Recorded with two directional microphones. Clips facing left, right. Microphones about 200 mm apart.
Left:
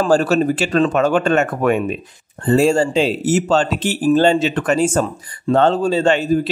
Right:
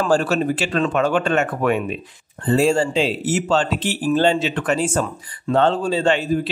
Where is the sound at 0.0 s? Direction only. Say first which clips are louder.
Left 4 dB; 40° left (ahead or behind).